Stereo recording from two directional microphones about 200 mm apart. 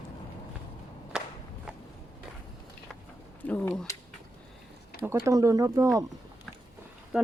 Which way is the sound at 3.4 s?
5° left (ahead or behind).